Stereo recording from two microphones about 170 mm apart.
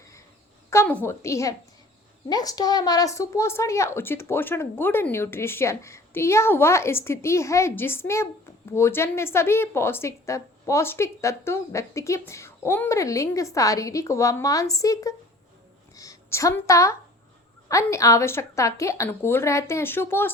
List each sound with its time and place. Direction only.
0.7 s a woman's voice: 10° left (ahead or behind)